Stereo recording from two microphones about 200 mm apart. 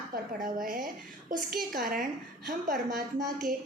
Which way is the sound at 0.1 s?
45° right (ahead or behind).